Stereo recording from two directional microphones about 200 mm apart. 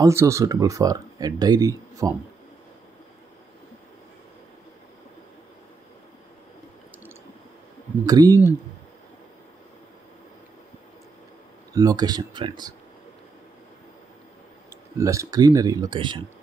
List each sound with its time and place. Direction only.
0.0 s speech: 15° right (ahead or behind)
8.0 s speech: 20° right (ahead or behind)
11.7 s speech: 20° right (ahead or behind)
14.7 s speech: 15° right (ahead or behind)